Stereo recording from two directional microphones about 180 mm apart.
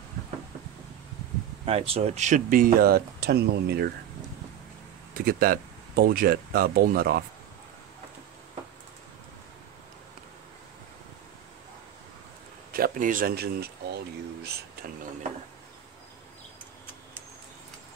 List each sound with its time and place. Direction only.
1.7 s speech: 35° right (ahead or behind); by 3.9 s 65° right (ahead or behind)
5.1 s speech: 55° right (ahead or behind)
12.7 s speech: 50° right (ahead or behind)